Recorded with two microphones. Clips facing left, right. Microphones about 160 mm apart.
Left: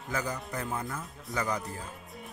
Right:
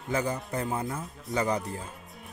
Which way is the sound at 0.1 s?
30° right (ahead or behind).